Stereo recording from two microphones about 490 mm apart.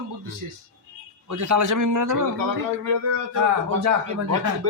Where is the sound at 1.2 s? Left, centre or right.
Right.